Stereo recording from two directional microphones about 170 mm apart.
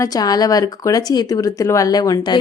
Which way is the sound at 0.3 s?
20° left (ahead or behind).